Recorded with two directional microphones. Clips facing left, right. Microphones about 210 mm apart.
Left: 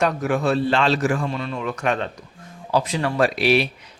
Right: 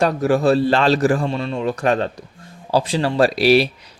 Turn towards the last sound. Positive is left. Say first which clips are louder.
# right 4 dB
turn(degrees=-35)  # may be behind; listen again after turning